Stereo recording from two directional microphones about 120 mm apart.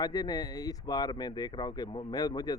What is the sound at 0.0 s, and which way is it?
Speech, 35° left (ahead or behind).